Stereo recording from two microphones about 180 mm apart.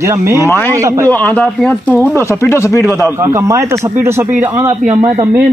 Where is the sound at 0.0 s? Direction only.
15° right (ahead or behind).